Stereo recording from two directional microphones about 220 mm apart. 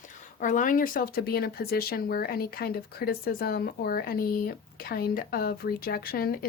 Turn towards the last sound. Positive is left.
turn(degrees=45)  # may be behind; listen again after turning